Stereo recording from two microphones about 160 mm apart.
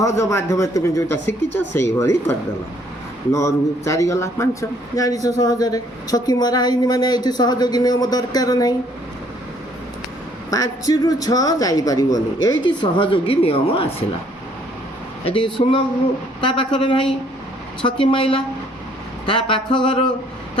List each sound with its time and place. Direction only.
0.0 s a woman's voice: 20° left (ahead or behind)
3.3 s a woman's voice: 20° left (ahead or behind)
10.5 s a woman's voice: 20° left (ahead or behind)
15.2 s a sound: 35° left (ahead or behind)